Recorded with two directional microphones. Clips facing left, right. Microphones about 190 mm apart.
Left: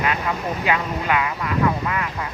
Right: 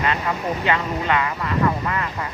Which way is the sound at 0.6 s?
10° left (ahead or behind).